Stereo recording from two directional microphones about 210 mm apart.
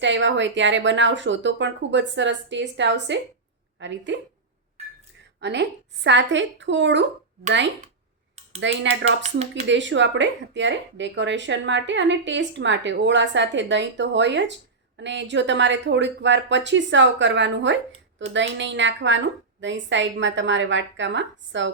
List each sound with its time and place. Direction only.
0.0 s speech: 60° right (ahead or behind)
5.4 s speech: 55° right (ahead or behind)
8.6 s speech: 60° right (ahead or behind)
9.2 s speech: 30° right (ahead or behind)
9.6 s speech: 60° right (ahead or behind)